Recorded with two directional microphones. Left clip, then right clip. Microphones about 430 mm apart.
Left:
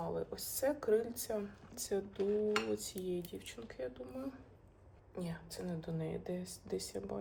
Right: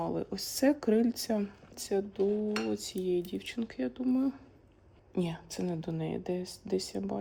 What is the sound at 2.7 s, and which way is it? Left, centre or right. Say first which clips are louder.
Speech: right 8 dB; centre.